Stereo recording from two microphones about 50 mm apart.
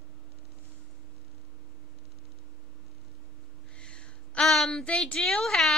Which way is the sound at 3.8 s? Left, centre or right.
Centre.